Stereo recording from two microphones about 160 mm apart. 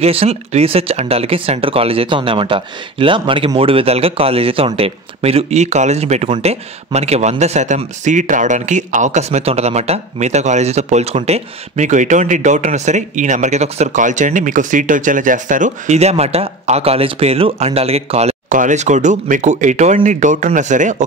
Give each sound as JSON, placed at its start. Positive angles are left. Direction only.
{"t": 0.0, "sound": "speech", "side_deg": -40}